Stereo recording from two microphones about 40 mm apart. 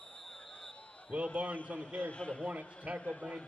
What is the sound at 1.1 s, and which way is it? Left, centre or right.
Speech, right.